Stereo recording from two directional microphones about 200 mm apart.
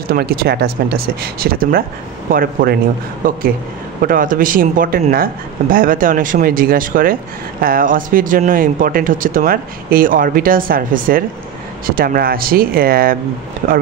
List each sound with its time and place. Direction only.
0.1 s speech: 50° right (ahead or behind)
4.0 s speech: 45° right (ahead or behind)